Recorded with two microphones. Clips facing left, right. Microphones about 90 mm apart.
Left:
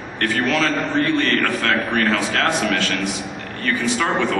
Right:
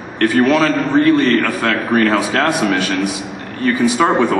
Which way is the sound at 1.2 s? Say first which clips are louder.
Right 5 dB; 15° right (ahead or behind).